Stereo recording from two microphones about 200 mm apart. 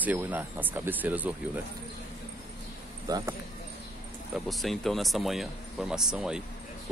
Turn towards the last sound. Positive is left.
turn(degrees=-5)  # may be behind; listen again after turning